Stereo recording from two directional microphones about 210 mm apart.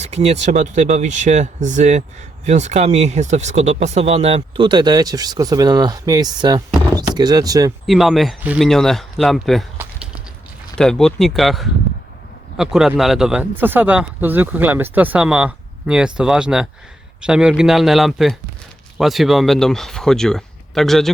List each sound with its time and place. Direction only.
0.0 s speech: 30° right (ahead or behind)
7.9 s a man's voice: centre (ahead or behind)